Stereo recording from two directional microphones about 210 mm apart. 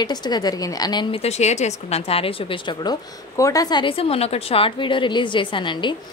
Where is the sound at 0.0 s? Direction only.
20° left (ahead or behind).